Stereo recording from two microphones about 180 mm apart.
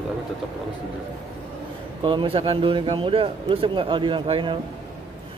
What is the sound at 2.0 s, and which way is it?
A man's voice, 25° right (ahead or behind).